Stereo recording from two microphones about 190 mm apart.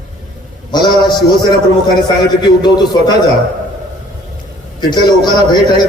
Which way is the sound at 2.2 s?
20° left (ahead or behind).